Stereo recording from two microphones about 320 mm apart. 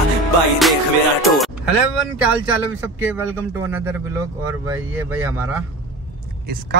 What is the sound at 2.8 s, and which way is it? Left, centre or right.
A man's voice, centre.